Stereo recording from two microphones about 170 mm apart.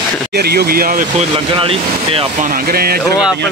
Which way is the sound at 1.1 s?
35° right (ahead or behind).